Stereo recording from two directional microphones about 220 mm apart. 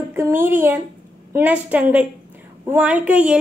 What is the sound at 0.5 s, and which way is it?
A woman's voice, 10° right (ahead or behind).